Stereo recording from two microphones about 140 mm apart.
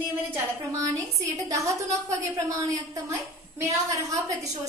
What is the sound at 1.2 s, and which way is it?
A woman's voice, 25° right (ahead or behind).